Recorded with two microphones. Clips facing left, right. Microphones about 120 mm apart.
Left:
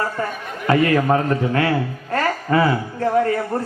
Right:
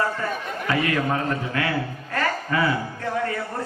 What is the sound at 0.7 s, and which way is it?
A man's voice, 40° left (ahead or behind).